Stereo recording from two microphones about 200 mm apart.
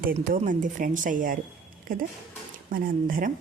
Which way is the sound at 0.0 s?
45° right (ahead or behind).